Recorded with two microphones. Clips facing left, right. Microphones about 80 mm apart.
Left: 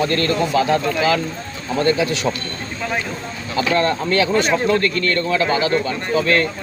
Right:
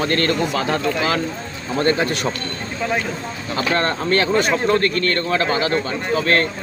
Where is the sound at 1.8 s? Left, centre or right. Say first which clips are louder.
Left 1 dB; right.